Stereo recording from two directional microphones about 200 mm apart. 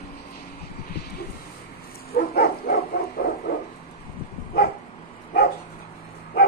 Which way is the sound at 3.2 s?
50° left (ahead or behind).